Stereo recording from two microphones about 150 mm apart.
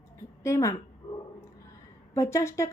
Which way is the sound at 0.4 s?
20° left (ahead or behind).